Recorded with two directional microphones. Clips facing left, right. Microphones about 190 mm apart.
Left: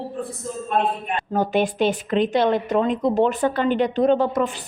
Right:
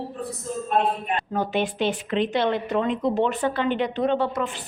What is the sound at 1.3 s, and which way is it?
A woman's voice, 45° left (ahead or behind).